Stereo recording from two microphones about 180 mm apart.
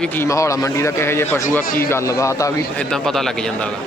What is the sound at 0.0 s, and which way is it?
A man's voice, 10° left (ahead or behind).